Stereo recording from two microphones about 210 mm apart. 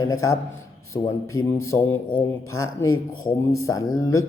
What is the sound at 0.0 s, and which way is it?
A man's voice, 15° left (ahead or behind).